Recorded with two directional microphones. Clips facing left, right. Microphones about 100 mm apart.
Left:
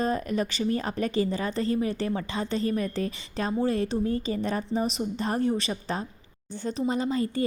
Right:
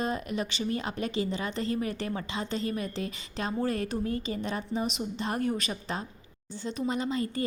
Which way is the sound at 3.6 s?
25° left (ahead or behind).